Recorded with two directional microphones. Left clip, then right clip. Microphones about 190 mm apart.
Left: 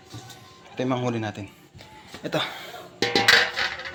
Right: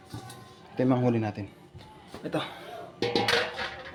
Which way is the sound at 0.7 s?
25° right (ahead or behind).